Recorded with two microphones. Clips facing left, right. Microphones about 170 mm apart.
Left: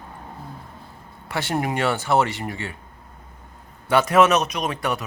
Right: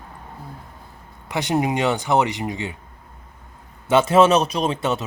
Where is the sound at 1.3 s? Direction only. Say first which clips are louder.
Right 3 dB; 20° right (ahead or behind).